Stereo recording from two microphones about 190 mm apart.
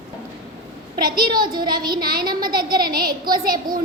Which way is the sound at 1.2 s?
25° right (ahead or behind).